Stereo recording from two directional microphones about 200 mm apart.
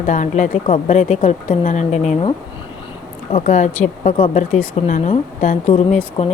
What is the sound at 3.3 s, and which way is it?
A woman's voice, 35° left (ahead or behind).